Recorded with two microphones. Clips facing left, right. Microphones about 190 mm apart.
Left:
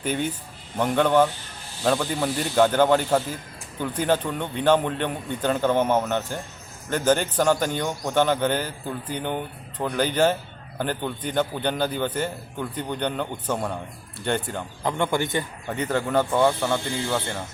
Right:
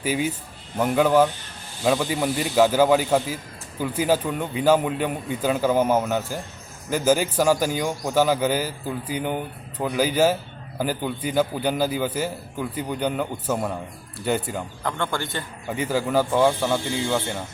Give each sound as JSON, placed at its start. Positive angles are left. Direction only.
{"t": 0.0, "sound": "a man's voice", "side_deg": -5}
{"t": 14.8, "sound": "speech", "side_deg": 15}
{"t": 15.7, "sound": "a man's voice", "side_deg": -5}